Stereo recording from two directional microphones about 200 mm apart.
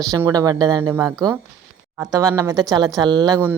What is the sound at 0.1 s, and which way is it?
Speech, 20° right (ahead or behind).